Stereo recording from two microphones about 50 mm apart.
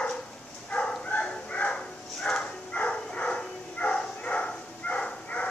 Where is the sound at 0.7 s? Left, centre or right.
Centre.